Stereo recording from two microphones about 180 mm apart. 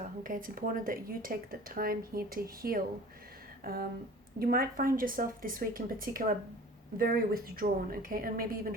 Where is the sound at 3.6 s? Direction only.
55° right (ahead or behind).